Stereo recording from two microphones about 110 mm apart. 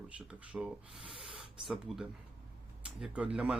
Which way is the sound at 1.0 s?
55° right (ahead or behind).